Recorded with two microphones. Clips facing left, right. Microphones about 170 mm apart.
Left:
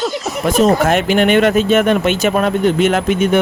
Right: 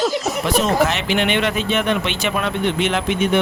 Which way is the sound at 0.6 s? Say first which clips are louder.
Left 5 dB; 50° left (ahead or behind).